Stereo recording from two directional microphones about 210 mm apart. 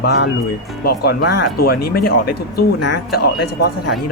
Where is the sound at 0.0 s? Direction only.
50° left (ahead or behind).